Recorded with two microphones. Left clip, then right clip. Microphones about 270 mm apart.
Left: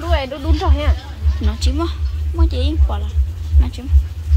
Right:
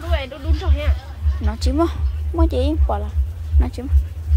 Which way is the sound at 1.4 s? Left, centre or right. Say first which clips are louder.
Right 3 dB; centre.